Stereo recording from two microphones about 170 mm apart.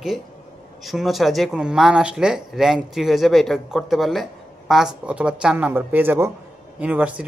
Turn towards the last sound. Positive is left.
turn(degrees=-10)  # may be behind; listen again after turning